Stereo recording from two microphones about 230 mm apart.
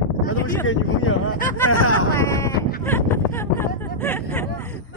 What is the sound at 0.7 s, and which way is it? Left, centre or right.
Speech, left.